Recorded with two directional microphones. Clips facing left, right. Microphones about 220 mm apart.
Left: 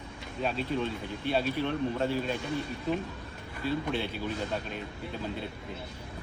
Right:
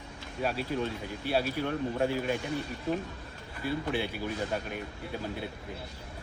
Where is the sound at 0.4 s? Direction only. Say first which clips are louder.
Even; 5° right (ahead or behind).